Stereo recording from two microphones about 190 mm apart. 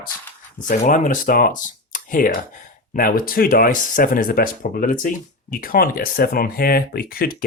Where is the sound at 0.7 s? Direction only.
40° left (ahead or behind).